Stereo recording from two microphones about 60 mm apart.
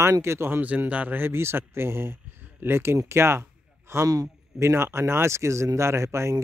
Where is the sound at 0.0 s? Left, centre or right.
Right.